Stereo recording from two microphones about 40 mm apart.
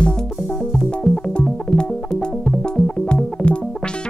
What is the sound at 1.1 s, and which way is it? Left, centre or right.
Music, left.